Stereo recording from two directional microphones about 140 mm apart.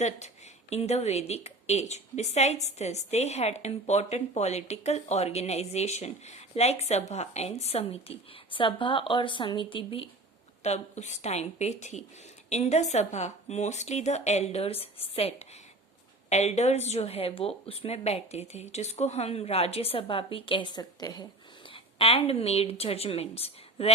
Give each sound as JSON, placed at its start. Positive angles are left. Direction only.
{"t": 0.7, "sound": "a woman's voice", "side_deg": 50}
{"t": 10.6, "sound": "a woman's voice", "side_deg": 55}
{"t": 21.7, "sound": "a woman's voice", "side_deg": 40}